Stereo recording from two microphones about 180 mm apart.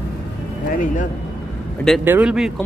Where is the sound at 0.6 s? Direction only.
50° left (ahead or behind).